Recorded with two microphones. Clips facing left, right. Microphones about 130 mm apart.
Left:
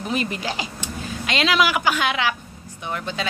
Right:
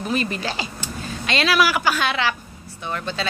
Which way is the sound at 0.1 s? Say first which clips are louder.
Right 1 dB; 15° left (ahead or behind).